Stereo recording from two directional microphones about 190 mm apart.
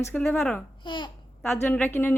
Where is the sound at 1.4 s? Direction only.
10° left (ahead or behind).